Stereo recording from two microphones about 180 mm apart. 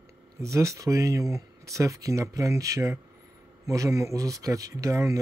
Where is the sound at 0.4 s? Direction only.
15° right (ahead or behind).